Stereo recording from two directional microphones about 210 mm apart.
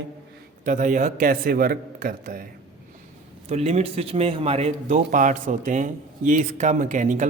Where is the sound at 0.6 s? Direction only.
40° right (ahead or behind).